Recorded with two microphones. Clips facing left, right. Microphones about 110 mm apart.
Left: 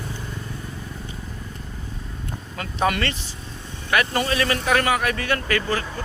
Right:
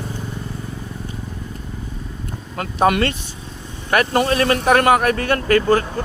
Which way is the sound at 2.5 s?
50° right (ahead or behind).